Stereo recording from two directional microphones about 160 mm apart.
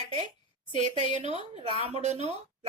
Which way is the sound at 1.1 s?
45° right (ahead or behind).